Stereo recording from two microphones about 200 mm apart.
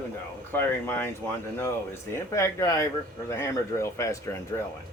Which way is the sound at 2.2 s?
15° left (ahead or behind).